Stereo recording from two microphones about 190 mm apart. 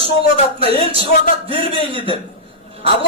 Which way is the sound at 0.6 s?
30° right (ahead or behind).